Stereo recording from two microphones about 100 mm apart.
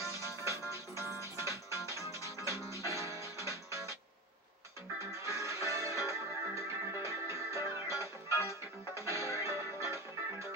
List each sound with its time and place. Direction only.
1.3 s music: 25° right (ahead or behind)
5.2 s music: 30° right (ahead or behind)